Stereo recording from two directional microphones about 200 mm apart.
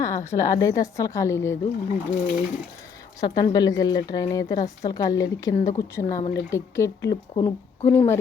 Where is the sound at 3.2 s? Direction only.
20° left (ahead or behind).